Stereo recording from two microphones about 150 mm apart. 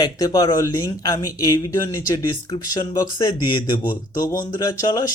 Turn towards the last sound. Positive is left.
turn(degrees=25)  # may be behind; listen again after turning